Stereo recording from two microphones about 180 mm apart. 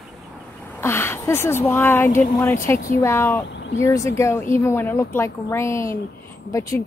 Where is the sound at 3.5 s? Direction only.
80° left.